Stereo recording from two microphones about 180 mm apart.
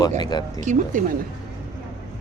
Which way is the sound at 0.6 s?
45° right (ahead or behind).